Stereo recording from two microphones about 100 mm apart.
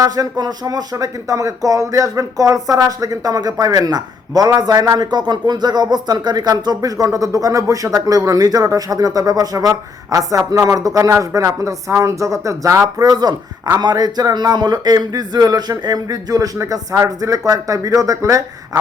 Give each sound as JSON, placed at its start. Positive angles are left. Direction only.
{"t": 0.0, "sound": "speech", "side_deg": -40}